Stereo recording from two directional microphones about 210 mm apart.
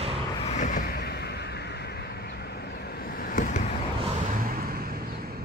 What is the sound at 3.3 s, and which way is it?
Vehicle, 40° left (ahead or behind).